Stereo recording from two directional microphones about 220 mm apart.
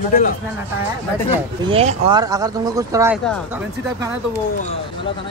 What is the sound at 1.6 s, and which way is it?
Speech, 25° right (ahead or behind).